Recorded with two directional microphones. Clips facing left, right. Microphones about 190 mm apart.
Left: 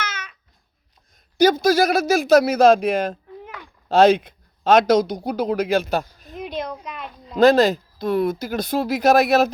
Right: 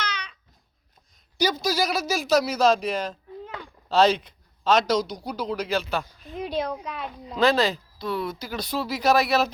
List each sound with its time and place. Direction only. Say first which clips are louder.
0.0 s babbling: left 1 dB; 5° left (ahead or behind)
1.4 s speech: left 9 dB; 50° left (ahead or behind)
6.5 s speech: right 1 dB; 10° right (ahead or behind)
7.3 s speech: left 7 dB; 45° left (ahead or behind)